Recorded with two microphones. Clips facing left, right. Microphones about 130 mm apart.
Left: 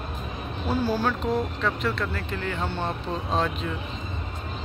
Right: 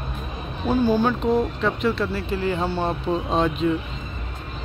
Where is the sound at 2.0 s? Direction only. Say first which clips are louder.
Right 6 dB; 10° right (ahead or behind).